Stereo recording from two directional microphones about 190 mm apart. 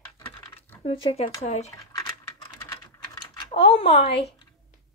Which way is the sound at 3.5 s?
30° left (ahead or behind).